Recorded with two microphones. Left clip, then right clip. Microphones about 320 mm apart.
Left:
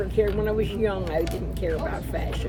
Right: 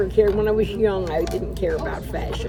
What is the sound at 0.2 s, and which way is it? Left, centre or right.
Speech, right.